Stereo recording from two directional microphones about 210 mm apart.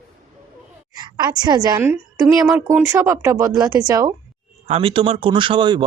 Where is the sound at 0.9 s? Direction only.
20° right (ahead or behind).